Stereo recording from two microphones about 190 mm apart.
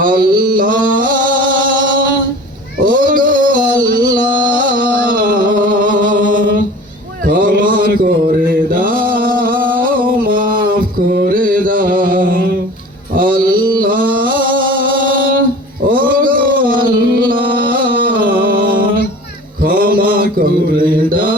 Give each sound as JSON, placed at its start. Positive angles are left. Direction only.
{"t": 0.0, "sound": "mantra", "side_deg": -50}
{"t": 0.4, "sound": "music", "side_deg": -45}
{"t": 4.5, "sound": "a sound", "side_deg": -45}
{"t": 7.3, "sound": "mantra", "side_deg": -45}
{"t": 9.7, "sound": "music", "side_deg": -45}
{"t": 13.1, "sound": "mantra", "side_deg": -50}
{"t": 14.8, "sound": "music", "side_deg": -50}
{"t": 19.6, "sound": "mantra", "side_deg": -50}